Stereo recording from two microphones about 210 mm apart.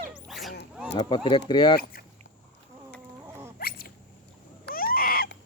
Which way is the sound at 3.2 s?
10° right (ahead or behind).